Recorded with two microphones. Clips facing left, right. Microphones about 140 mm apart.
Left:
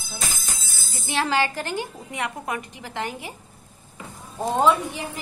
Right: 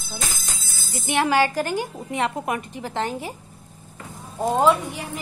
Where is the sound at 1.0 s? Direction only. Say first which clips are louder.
Right 3 dB; 15° right (ahead or behind).